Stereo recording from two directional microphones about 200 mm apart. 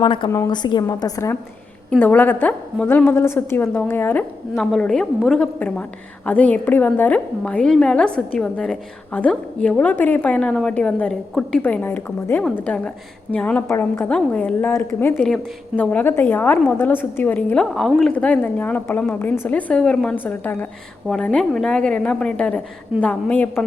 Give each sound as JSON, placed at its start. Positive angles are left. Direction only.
{"t": 0.0, "sound": "a woman's voice", "side_deg": 25}